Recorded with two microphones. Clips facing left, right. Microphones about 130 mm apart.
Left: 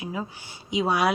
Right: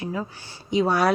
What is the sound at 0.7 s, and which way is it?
Speech, 5° left (ahead or behind).